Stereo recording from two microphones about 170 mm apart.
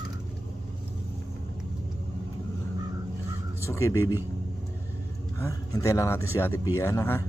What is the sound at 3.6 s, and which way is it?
Speech, 15° left (ahead or behind).